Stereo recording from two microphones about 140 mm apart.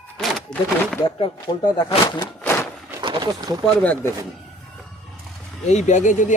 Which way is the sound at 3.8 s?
10° left (ahead or behind).